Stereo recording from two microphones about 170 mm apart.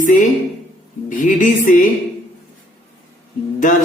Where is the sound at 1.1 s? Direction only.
50° left (ahead or behind).